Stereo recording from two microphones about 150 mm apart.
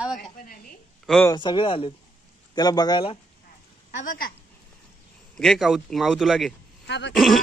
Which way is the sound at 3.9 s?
55° left (ahead or behind).